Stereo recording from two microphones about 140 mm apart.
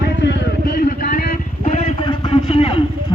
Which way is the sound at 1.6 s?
50° left (ahead or behind).